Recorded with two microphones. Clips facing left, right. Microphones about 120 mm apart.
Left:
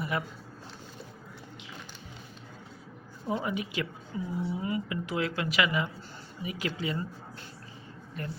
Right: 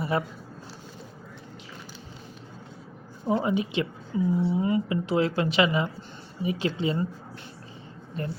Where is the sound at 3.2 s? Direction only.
30° right (ahead or behind).